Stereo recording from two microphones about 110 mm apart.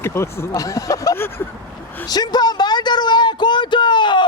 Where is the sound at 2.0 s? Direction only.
40° left (ahead or behind).